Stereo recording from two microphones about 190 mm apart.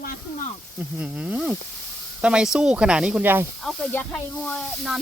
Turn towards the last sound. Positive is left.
turn(degrees=0)  # may be behind; listen again after turning